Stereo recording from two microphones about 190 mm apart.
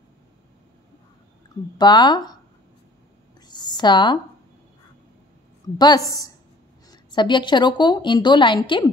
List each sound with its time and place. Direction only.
1.8 s a woman's voice: 20° left (ahead or behind)
3.4 s a sound: 20° left (ahead or behind)
5.8 s a woman's voice: 20° left (ahead or behind)